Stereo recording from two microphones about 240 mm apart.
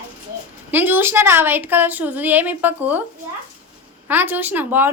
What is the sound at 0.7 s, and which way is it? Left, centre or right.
A woman's voice, centre.